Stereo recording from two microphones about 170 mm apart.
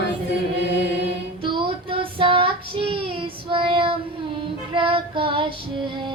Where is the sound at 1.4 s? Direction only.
30° right (ahead or behind).